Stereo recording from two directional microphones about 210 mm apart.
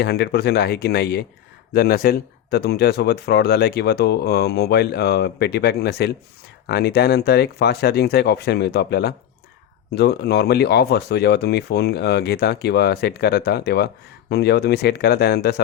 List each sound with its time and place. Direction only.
0.0 s speech: 50° left (ahead or behind)